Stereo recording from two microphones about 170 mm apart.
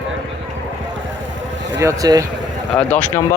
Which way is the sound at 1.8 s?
20° right (ahead or behind).